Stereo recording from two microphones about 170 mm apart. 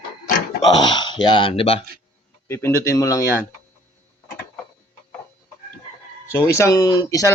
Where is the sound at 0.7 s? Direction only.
25° left (ahead or behind).